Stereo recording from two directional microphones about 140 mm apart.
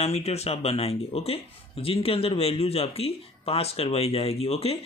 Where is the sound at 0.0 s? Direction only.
45° left (ahead or behind).